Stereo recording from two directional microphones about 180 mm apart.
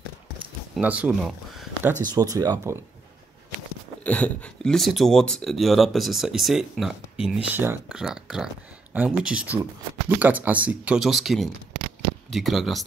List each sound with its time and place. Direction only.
0.7 s speech: 10° right (ahead or behind)
2.1 s speech: 20° right (ahead or behind)
4.0 s speech: 5° left (ahead or behind)
7.5 s speech: 10° right (ahead or behind)